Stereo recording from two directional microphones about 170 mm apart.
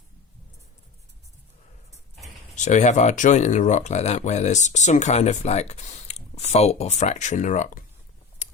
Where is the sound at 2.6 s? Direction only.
45° left (ahead or behind).